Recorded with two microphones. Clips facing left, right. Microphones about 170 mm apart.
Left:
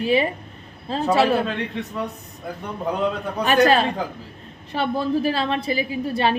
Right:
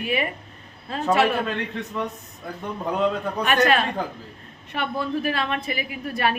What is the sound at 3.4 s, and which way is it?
A woman's voice, 35° left (ahead or behind).